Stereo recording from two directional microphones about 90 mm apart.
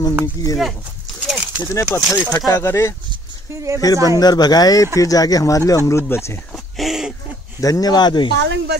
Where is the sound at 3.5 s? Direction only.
35° right (ahead or behind).